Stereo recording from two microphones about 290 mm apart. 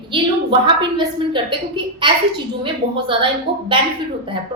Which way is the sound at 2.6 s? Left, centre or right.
Centre.